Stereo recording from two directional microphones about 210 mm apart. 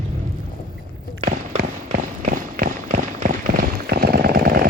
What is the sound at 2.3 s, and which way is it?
Run, 40° right (ahead or behind).